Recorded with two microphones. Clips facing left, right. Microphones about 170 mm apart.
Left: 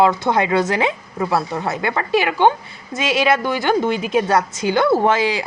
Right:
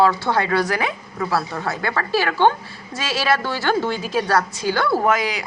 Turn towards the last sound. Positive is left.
turn(degrees=25)  # may be behind; listen again after turning